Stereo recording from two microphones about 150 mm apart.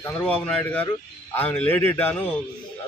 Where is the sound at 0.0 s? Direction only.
10° left (ahead or behind).